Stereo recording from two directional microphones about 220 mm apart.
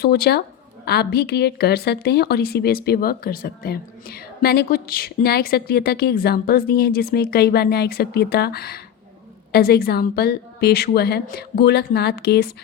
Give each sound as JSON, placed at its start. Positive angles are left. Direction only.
{"t": 0.0, "sound": "a woman's voice", "side_deg": 45}